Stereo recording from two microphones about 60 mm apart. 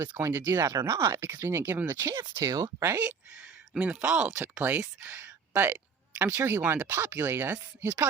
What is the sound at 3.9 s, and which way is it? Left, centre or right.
Speech, centre.